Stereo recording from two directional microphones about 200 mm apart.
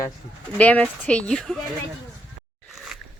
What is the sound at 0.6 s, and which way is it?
Speech, 5° left (ahead or behind).